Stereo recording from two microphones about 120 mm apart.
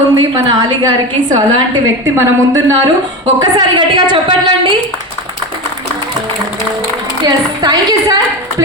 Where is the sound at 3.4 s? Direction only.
40° right (ahead or behind).